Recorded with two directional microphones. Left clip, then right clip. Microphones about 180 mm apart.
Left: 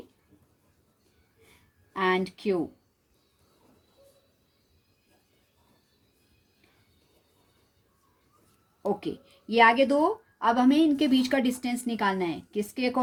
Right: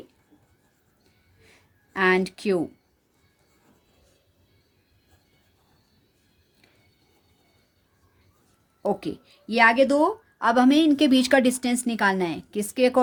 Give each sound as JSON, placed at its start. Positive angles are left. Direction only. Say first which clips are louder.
{"t": 1.9, "sound": "speech", "louder": "right 5 dB", "side_deg": -45}
{"t": 8.9, "sound": "speech", "louder": "right 3 dB", "side_deg": -30}